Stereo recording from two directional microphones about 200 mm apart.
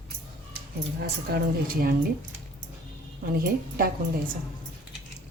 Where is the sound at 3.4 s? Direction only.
50° right (ahead or behind).